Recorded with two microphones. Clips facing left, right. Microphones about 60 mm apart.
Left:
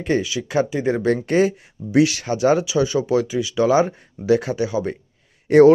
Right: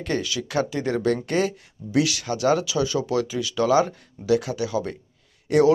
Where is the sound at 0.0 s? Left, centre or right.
Left.